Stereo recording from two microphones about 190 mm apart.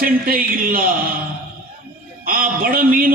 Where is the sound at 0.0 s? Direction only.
50° right (ahead or behind).